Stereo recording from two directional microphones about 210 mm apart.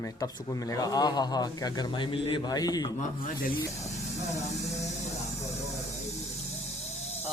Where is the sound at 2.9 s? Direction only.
40° left (ahead or behind).